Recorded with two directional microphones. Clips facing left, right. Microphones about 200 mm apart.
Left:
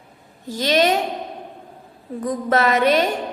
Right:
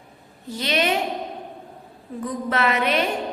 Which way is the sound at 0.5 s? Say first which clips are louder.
Left 5 dB; 40° left (ahead or behind).